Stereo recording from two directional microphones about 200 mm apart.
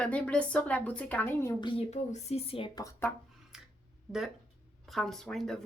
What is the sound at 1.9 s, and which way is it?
Speech, 35° left (ahead or behind).